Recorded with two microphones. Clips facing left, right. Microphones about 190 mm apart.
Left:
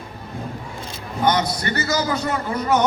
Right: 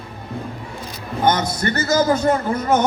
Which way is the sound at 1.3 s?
50° right (ahead or behind).